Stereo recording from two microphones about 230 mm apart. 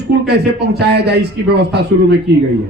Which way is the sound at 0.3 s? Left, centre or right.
Right.